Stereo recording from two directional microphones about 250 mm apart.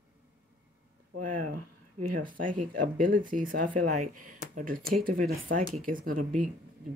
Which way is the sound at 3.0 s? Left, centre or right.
Right.